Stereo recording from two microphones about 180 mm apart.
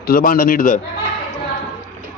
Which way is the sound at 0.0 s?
55° left (ahead or behind).